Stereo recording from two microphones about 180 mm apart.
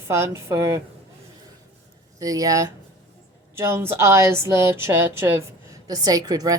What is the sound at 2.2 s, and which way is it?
Speech, 20° right (ahead or behind).